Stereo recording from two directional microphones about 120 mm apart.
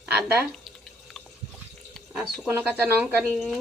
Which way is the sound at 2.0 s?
Centre (ahead or behind).